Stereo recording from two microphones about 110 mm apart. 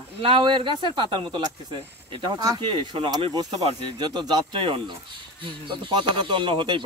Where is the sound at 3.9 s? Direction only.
40° right (ahead or behind).